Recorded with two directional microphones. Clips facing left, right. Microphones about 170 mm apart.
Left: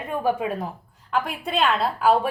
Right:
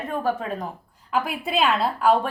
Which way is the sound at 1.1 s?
5° right (ahead or behind).